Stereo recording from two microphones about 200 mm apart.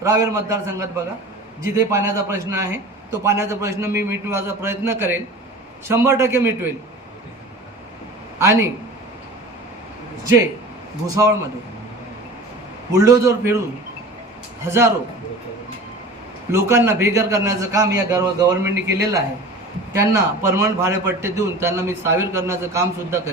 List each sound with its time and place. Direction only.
0.0 s a man's voice: 15° right (ahead or behind)
8.4 s a man's voice: 15° right (ahead or behind)
11.0 s a man's voice: 15° right (ahead or behind)
12.9 s a man's voice: 15° right (ahead or behind)
14.6 s a man's voice: 15° right (ahead or behind)
16.5 s a man's voice: 15° right (ahead or behind)
19.9 s a man's voice: 15° right (ahead or behind)